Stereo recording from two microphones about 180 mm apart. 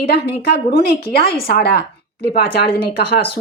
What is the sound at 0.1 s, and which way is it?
Speech, 65° left (ahead or behind).